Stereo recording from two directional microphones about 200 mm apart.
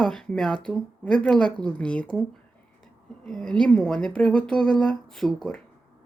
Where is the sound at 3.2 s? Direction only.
Centre (ahead or behind).